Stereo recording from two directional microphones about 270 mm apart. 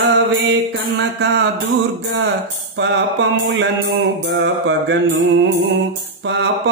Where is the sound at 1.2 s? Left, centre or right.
Right.